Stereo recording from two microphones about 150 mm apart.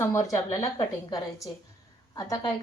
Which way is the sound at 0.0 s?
20° left (ahead or behind).